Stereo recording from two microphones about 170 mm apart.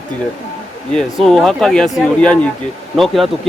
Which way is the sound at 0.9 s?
5° left (ahead or behind).